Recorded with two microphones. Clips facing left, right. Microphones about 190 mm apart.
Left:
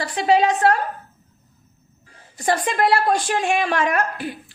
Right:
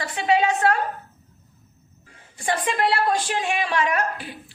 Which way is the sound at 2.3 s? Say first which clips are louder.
Left 3 dB; 40° left (ahead or behind).